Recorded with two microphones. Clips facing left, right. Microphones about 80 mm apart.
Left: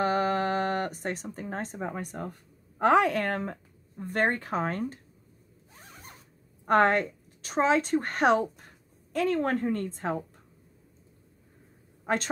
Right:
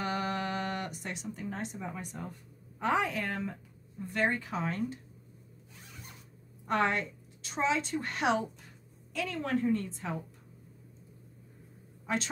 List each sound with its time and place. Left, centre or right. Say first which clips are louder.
0.0 s a sound: left 7 dB; left
2.8 s a woman's voice: left 8 dB; left
5.8 s zipper: left 3 dB; left
6.6 s a woman's voice: left 7 dB; left
12.1 s a woman's voice: left 5 dB; left